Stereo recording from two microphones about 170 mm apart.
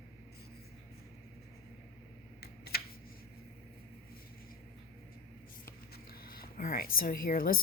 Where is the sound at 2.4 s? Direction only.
65° left (ahead or behind).